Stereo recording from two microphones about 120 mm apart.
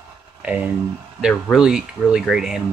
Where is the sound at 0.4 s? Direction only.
10° right (ahead or behind).